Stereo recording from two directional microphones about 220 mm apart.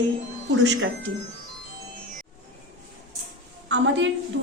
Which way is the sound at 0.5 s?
55° right (ahead or behind).